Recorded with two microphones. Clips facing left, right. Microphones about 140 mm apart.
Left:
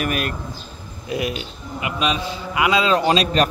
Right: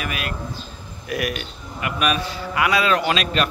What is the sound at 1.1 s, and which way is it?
A man's voice, 25° left (ahead or behind).